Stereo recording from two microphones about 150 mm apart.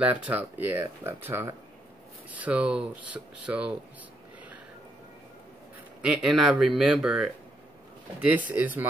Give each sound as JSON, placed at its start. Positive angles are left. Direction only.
{"t": 0.2, "sound": "speech", "side_deg": -10}
{"t": 6.0, "sound": "speech", "side_deg": -5}